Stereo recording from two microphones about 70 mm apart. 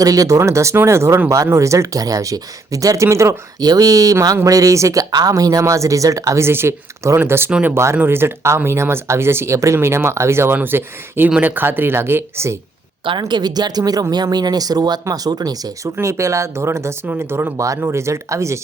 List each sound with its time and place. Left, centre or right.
0.0 s speech: right
3.6 s speech: right
5.1 s speech: right
13.1 s speech: right
14.1 s speech: right
16.0 s speech: right